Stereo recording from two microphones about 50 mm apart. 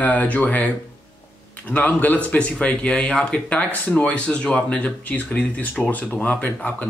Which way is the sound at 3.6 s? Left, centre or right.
Left.